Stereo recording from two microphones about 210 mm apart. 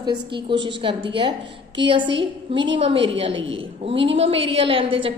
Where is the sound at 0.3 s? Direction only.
25° right (ahead or behind).